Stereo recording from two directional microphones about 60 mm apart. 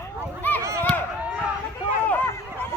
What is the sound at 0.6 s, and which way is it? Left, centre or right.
Run, right.